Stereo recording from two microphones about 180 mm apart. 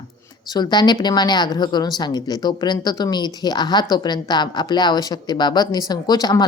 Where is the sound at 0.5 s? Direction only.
25° left (ahead or behind).